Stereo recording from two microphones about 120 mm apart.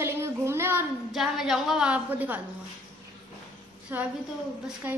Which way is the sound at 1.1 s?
5° right (ahead or behind).